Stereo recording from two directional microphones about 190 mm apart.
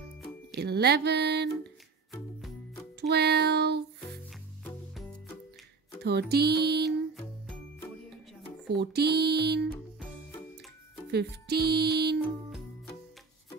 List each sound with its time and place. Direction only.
0.5 s speech: 60° right (ahead or behind)
3.0 s child singing: 60° right (ahead or behind)
6.0 s speech: 60° right (ahead or behind)
8.7 s speech: 60° right (ahead or behind)
11.1 s speech: 60° right (ahead or behind)